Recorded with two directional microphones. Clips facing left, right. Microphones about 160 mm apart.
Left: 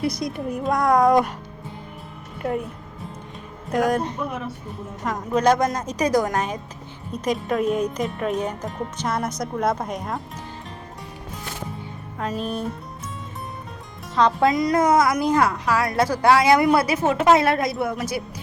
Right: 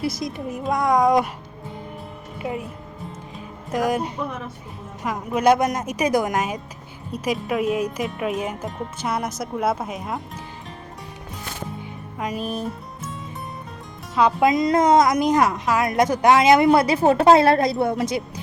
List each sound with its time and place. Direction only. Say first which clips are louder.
0.0 s speech: left 1 dB; centre (ahead or behind)
2.4 s speech: left 3 dB; 5° right (ahead or behind)
3.3 s music: left 2 dB; centre (ahead or behind)
5.0 s a woman's voice: right 1 dB; 10° right (ahead or behind)
12.4 s speech: left 1 dB; centre (ahead or behind)
14.2 s a woman's voice: right 1 dB; 10° right (ahead or behind)
14.5 s a woman's voice: right 2 dB; 25° right (ahead or behind)
17.0 s a woman's voice: right 3 dB; 35° right (ahead or behind)